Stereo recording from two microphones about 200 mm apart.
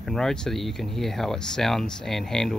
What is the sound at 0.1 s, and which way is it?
Speech, centre (ahead or behind).